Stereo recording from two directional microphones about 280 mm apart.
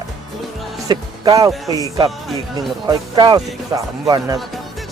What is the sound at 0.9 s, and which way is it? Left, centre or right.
Music, centre.